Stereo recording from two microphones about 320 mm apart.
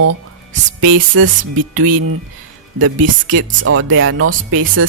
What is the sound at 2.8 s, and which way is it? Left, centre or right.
Speech, right.